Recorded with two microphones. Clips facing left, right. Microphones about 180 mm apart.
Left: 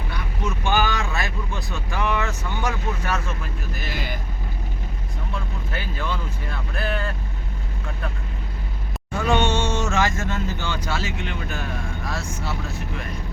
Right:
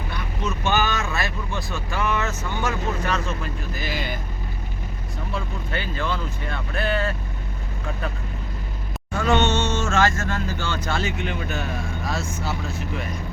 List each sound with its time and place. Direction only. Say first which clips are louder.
0.4 s vehicle: even; 10° left (ahead or behind)
3.8 s speech: right 2 dB; centre (ahead or behind)
5.7 s speech: right 2 dB; 5° left (ahead or behind)
9.1 s speech: right 1 dB; 10° left (ahead or behind)